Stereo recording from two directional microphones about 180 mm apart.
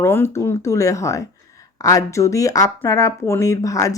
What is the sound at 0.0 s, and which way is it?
Speech, 15° left (ahead or behind).